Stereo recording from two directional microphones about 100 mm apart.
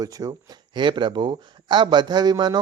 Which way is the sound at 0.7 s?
50° right (ahead or behind).